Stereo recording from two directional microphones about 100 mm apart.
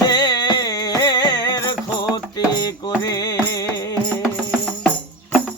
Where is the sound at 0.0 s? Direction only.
40° left (ahead or behind).